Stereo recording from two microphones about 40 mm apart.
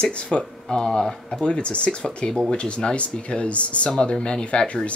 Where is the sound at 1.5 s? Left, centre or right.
Left.